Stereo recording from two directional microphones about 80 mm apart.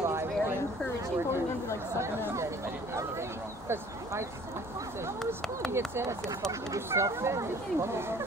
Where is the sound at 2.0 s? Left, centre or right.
Right.